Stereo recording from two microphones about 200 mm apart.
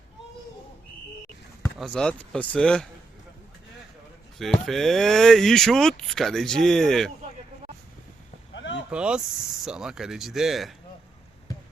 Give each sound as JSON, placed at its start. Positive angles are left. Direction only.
{"t": 1.8, "sound": "speech", "side_deg": 5}
{"t": 4.4, "sound": "speech", "side_deg": 0}
{"t": 8.5, "sound": "a sound", "side_deg": 65}
{"t": 8.9, "sound": "speech", "side_deg": -5}